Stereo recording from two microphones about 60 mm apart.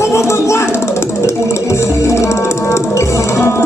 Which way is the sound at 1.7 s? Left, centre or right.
Left.